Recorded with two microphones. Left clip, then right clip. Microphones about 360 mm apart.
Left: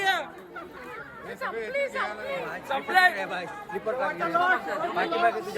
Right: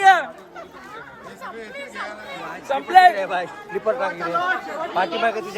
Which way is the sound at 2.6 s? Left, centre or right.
Right.